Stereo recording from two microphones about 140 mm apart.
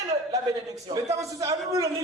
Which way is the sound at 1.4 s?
25° right (ahead or behind).